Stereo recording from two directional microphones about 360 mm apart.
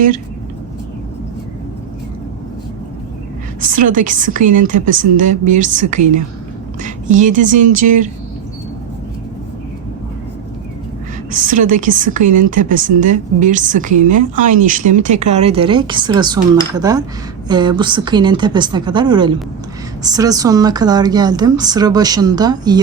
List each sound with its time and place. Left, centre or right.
3.6 s a woman's voice: right
11.3 s a woman's voice: right